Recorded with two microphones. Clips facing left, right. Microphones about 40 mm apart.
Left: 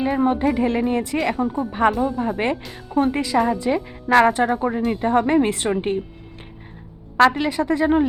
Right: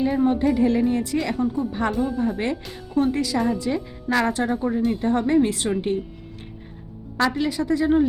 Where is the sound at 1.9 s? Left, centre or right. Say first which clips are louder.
Left 3 dB; centre.